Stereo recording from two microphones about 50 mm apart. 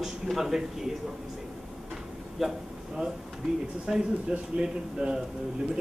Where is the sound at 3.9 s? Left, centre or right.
Centre.